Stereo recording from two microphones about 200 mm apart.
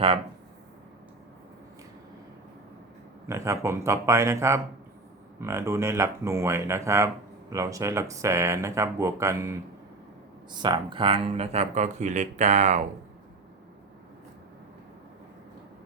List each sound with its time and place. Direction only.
3.2 s speech: 15° right (ahead or behind); by 12.8 s 35° right (ahead or behind)